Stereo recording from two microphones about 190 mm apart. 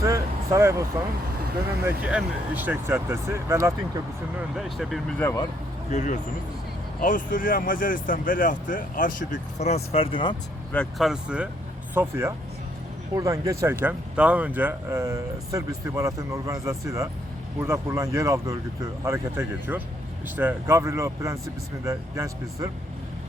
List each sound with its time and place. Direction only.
0.0 s vehicle: 15° right (ahead or behind)
1.8 s speech: 5° right (ahead or behind)
4.4 s speech: centre (ahead or behind); by 5.5 s 15° left (ahead or behind)
5.9 s speech: 40° left (ahead or behind)
10.7 s speech: 5° left (ahead or behind); by 22.7 s 15° right (ahead or behind)